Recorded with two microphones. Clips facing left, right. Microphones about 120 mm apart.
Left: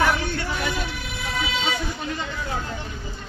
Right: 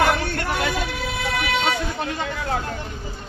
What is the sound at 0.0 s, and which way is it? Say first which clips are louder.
Vehicle: right 2 dB; 60° right (ahead or behind).